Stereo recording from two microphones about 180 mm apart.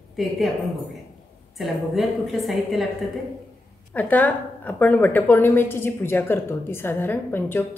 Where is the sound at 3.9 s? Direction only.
10° left (ahead or behind).